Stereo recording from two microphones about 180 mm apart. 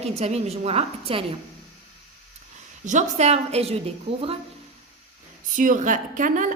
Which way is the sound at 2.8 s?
40° right (ahead or behind).